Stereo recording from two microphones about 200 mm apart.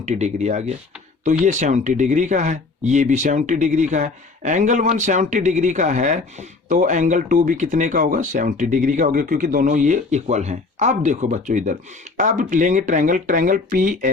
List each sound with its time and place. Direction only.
0.0 s speech: 35° right (ahead or behind)